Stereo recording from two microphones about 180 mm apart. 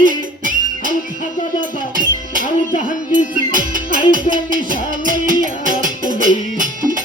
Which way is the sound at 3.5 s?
50° right (ahead or behind).